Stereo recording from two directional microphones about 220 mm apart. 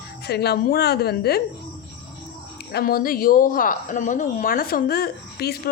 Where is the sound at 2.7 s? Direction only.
40° left (ahead or behind).